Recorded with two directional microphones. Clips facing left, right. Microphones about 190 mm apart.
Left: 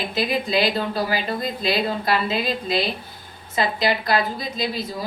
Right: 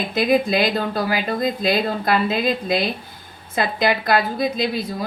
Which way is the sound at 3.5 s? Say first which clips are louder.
Right 2 dB; 55° right (ahead or behind).